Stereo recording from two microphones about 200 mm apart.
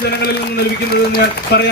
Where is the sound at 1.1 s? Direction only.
50° left (ahead or behind).